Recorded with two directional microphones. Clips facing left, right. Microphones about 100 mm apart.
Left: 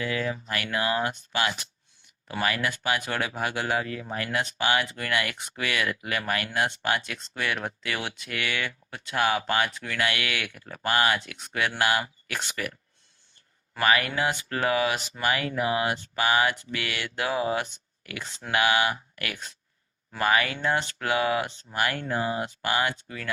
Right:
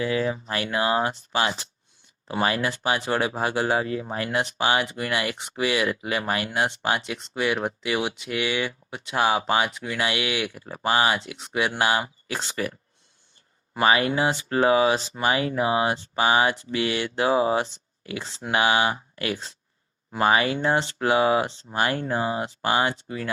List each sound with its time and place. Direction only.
0.0 s speech: 25° right (ahead or behind)
13.7 s speech: 25° right (ahead or behind)